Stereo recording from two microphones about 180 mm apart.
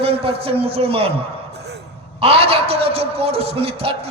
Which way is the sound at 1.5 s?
65° right (ahead or behind).